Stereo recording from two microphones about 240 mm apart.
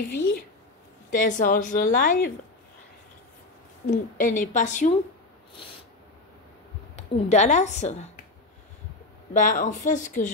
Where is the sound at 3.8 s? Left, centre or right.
Left.